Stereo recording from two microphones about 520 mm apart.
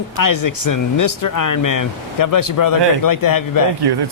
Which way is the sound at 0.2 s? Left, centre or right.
Left.